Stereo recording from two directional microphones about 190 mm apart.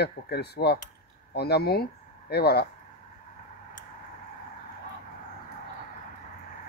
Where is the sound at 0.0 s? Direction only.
60° left (ahead or behind).